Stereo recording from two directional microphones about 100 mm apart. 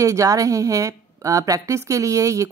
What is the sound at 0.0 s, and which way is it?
A woman's voice, 35° right (ahead or behind).